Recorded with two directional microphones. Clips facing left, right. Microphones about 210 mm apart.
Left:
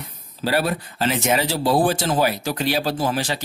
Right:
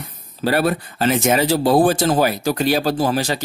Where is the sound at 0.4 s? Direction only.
55° right (ahead or behind).